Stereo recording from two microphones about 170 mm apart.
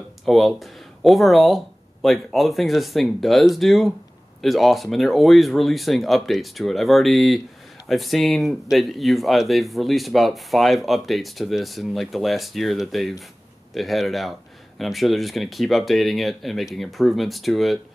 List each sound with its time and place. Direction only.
0.2 s speech: centre (ahead or behind)